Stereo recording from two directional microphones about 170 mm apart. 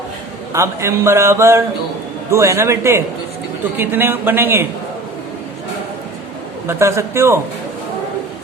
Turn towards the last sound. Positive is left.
turn(degrees=-15)  # may be behind; listen again after turning